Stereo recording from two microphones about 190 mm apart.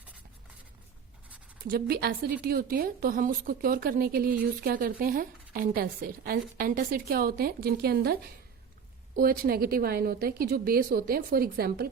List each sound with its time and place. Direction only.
1.6 s a woman's voice: 50° right (ahead or behind)